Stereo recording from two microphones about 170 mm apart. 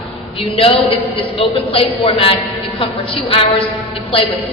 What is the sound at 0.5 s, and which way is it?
A man's voice, 35° left (ahead or behind).